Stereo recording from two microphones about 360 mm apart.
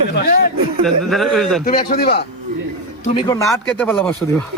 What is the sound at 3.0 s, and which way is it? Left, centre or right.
Speech, centre.